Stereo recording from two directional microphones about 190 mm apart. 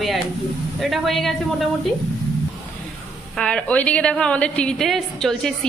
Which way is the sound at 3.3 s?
5° left (ahead or behind).